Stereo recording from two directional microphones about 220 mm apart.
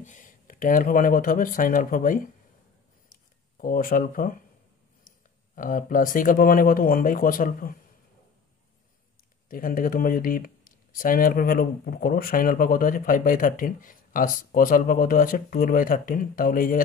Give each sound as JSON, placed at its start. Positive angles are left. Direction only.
{"t": 0.0, "sound": "speech", "side_deg": 35}
{"t": 3.1, "sound": "a sound", "side_deg": 40}
{"t": 5.6, "sound": "speech", "side_deg": 40}
{"t": 9.5, "sound": "speech", "side_deg": 40}